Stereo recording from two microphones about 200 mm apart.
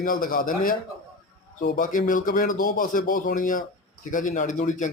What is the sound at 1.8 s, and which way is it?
A man's voice, 40° left (ahead or behind).